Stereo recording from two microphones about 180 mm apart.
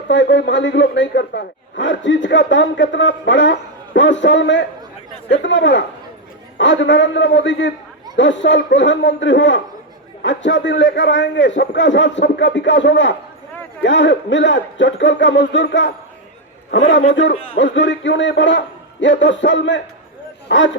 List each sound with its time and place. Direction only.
0.1 s a man's voice: 90° left
17.3 s a man's voice: 30° left (ahead or behind)
17.6 s a man's voice: 90° left
20.5 s speech: 80° left